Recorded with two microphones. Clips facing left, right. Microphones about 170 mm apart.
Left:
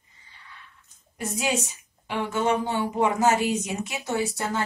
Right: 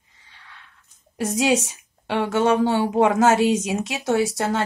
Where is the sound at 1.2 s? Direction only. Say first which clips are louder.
Right 7 dB; 90° right.